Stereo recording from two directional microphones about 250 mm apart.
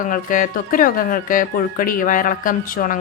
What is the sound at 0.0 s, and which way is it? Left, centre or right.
Speech, left.